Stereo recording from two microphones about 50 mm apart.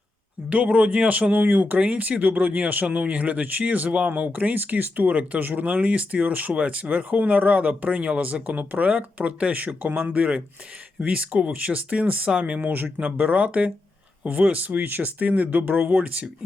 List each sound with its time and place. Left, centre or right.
0.5 s speech: right